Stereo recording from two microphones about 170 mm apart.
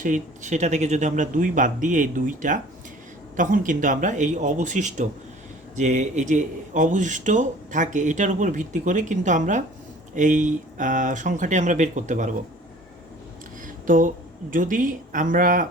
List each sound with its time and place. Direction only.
0.0 s speech: 45° right (ahead or behind)
13.8 s speech: 50° right (ahead or behind)